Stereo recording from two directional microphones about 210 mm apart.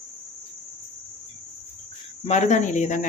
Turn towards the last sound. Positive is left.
turn(degrees=35)  # may be behind; listen again after turning